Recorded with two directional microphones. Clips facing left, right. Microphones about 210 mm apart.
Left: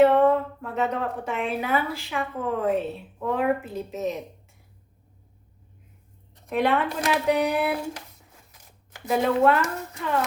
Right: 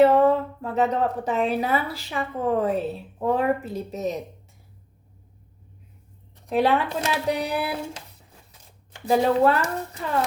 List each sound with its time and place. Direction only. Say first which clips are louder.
0.6 s speech: right 4 dB; 35° right (ahead or behind)
6.5 s speech: right 2 dB; 35° right (ahead or behind)